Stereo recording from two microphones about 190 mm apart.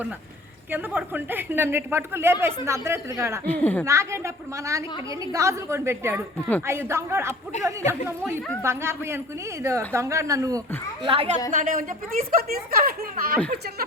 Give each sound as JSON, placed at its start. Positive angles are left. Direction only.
{"t": 0.7, "sound": "speech", "side_deg": -10}
{"t": 3.4, "sound": "a woman's voice", "side_deg": 10}
{"t": 3.8, "sound": "speech", "side_deg": -15}
{"t": 7.5, "sound": "speech", "side_deg": 40}
{"t": 7.9, "sound": "speech", "side_deg": -10}
{"t": 11.0, "sound": "a woman's voice", "side_deg": -30}
{"t": 11.5, "sound": "speech", "side_deg": -45}